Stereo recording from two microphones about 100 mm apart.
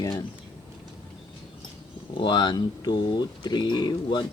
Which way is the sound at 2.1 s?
55° left (ahead or behind).